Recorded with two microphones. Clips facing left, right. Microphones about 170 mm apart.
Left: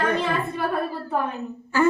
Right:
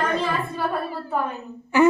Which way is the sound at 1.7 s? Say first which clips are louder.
Right 4 dB; 15° right (ahead or behind).